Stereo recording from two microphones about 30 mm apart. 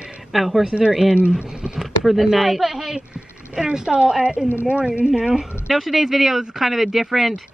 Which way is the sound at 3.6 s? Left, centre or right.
Right.